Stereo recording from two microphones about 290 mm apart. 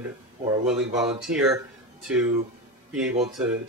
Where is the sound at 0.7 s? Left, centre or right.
Centre.